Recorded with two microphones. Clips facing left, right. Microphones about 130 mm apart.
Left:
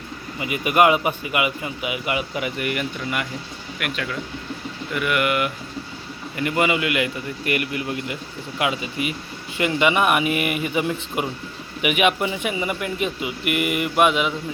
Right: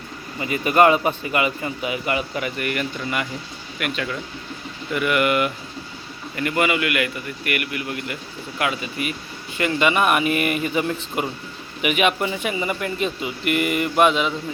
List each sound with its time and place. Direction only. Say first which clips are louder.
0.3 s speech: right 1 dB; 15° left (ahead or behind)
3.0 s speech: right 1 dB; 5° left (ahead or behind)
6.3 s a man's voice: even; 20° left (ahead or behind)